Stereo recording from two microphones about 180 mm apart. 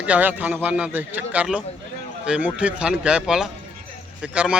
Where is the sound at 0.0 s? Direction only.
10° right (ahead or behind).